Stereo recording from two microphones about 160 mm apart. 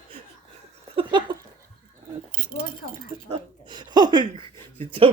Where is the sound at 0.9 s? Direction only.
30° right (ahead or behind).